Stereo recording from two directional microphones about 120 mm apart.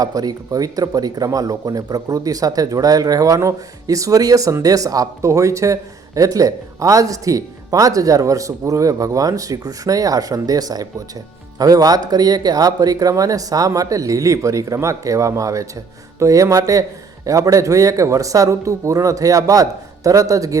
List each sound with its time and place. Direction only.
0.0 s speech: 30° right (ahead or behind)